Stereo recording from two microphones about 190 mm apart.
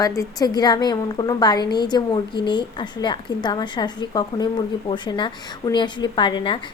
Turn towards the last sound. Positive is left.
turn(degrees=25)  # may be behind; listen again after turning